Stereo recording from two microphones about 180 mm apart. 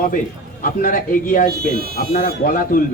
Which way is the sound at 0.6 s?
55° left (ahead or behind).